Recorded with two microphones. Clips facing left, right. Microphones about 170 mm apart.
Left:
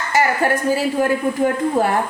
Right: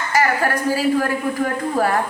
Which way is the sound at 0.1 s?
20° left (ahead or behind).